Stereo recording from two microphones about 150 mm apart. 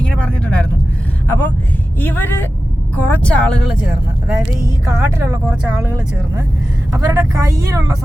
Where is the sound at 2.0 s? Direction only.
10° left (ahead or behind).